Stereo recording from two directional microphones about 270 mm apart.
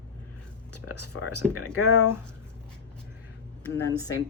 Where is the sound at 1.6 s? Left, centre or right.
Left.